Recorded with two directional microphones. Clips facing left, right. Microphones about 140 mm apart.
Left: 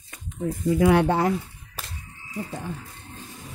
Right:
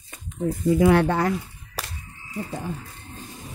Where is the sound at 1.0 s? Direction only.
25° left (ahead or behind).